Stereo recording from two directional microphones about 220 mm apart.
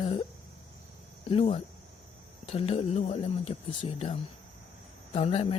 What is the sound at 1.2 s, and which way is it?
Speech, 25° left (ahead or behind).